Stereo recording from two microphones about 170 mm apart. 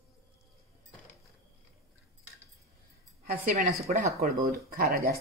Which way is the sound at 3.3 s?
45° right (ahead or behind).